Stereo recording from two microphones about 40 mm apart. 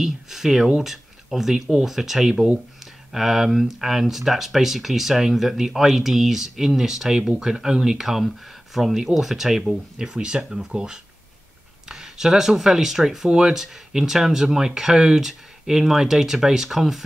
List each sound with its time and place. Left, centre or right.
0.0 s speech: centre
9.7 s speech: centre